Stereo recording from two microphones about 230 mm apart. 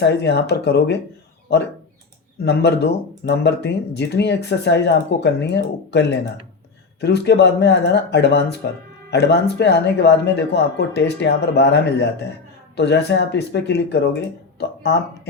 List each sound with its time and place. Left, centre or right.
0.0 s speech: left
2.4 s speech: left